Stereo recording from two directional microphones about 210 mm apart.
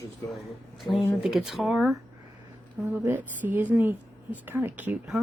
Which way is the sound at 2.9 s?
10° right (ahead or behind).